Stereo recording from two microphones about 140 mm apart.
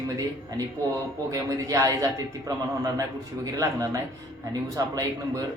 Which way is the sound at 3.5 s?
25° right (ahead or behind).